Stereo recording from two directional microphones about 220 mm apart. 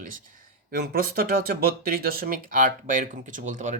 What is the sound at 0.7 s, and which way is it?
Speech, 40° right (ahead or behind).